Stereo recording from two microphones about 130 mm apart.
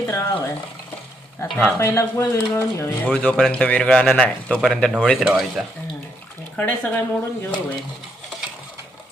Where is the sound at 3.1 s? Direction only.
10° left (ahead or behind).